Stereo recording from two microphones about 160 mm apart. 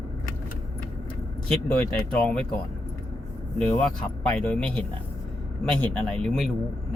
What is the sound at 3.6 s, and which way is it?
Speech, 10° left (ahead or behind).